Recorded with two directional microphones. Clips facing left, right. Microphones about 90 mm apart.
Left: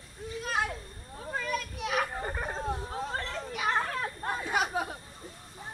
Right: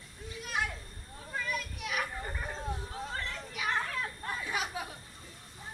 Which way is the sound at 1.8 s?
35° left (ahead or behind).